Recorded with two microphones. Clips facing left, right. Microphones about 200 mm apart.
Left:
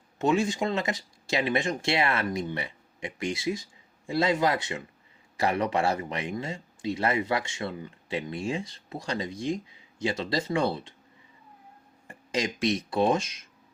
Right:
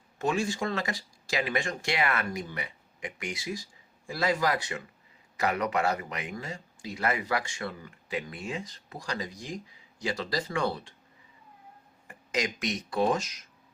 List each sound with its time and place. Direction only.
0.2 s speech: 20° left (ahead or behind)
12.0 s speech: 30° left (ahead or behind)